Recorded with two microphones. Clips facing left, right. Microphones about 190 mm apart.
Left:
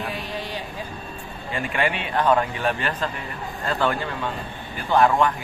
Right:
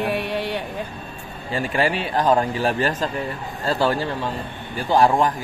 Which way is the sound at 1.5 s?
40° right (ahead or behind).